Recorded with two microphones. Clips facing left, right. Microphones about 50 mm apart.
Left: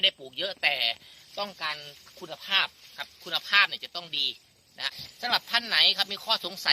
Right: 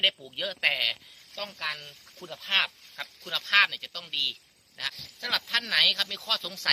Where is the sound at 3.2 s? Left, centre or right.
Centre.